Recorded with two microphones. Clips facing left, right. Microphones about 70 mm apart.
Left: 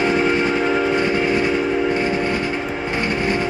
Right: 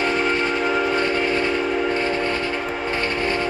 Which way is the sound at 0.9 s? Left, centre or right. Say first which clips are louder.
Left 2 dB; centre.